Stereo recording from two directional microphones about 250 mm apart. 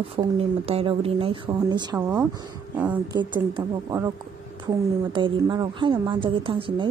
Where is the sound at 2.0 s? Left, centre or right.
Centre.